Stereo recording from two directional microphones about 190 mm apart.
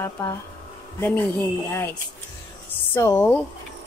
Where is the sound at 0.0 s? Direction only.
15° left (ahead or behind).